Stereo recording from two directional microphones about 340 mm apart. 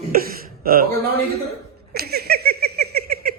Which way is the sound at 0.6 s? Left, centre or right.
Right.